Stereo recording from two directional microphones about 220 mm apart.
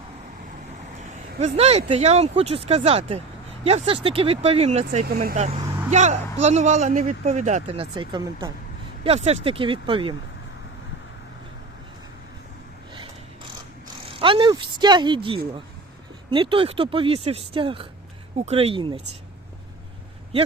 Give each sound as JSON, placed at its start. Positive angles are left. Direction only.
{"t": 1.4, "sound": "speech", "side_deg": -30}
{"t": 5.0, "sound": "speech", "side_deg": -45}
{"t": 14.1, "sound": "speech", "side_deg": -25}